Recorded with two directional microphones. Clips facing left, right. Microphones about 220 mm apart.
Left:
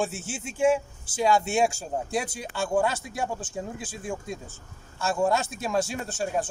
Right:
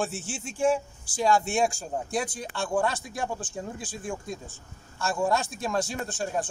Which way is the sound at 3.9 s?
5° left (ahead or behind).